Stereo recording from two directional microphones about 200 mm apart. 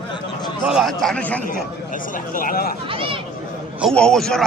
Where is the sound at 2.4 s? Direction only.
45° left (ahead or behind).